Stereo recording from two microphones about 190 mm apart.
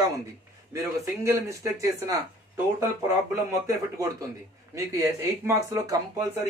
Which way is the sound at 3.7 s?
20° right (ahead or behind).